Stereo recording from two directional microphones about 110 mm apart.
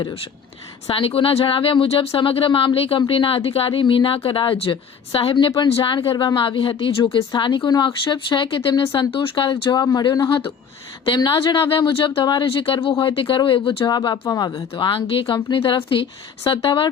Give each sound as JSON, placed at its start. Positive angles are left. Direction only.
{"t": 0.9, "sound": "a woman's voice", "side_deg": 55}
{"t": 11.7, "sound": "speech", "side_deg": 50}
{"t": 14.8, "sound": "speech", "side_deg": 50}